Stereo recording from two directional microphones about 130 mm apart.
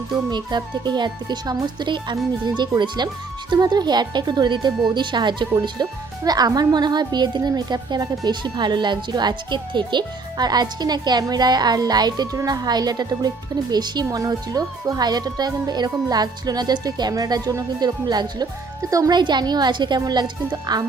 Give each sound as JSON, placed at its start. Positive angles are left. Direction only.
{"t": 0.1, "sound": "speech", "side_deg": -35}